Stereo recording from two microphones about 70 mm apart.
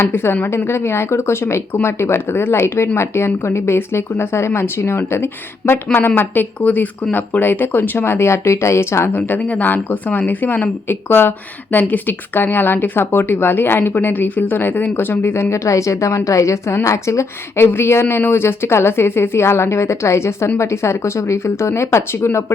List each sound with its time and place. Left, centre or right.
0.0 s speech: left